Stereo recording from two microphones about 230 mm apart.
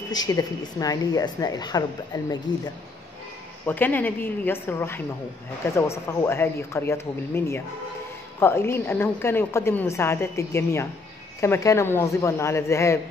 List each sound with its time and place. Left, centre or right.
0.1 s a woman's voice: centre
3.6 s a woman's voice: centre